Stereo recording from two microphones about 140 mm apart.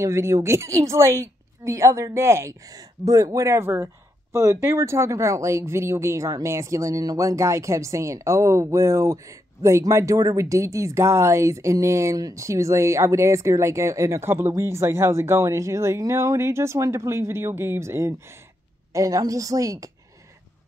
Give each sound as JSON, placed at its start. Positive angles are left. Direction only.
{"t": 0.0, "sound": "a woman's voice", "side_deg": -20}